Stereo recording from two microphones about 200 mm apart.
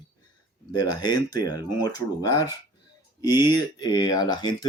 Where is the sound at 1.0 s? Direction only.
20° left (ahead or behind).